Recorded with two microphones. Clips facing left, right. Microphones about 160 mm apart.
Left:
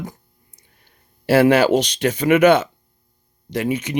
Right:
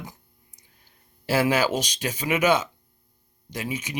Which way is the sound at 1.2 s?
60° left (ahead or behind).